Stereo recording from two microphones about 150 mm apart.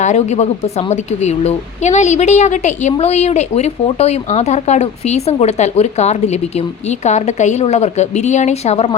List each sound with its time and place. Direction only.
0.0 s a woman's voice: 50° left (ahead or behind)